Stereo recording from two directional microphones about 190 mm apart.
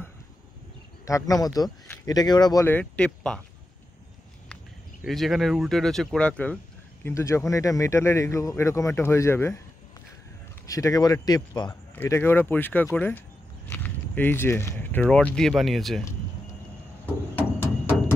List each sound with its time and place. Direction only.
1.0 s speech: 15° left (ahead or behind)
5.0 s speech: centre (ahead or behind)
10.7 s a man's voice: 20° left (ahead or behind)
11.9 s speech: 10° left (ahead or behind)
17.0 s a sound: 10° left (ahead or behind)